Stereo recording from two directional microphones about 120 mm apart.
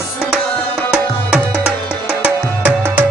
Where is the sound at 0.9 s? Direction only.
10° right (ahead or behind).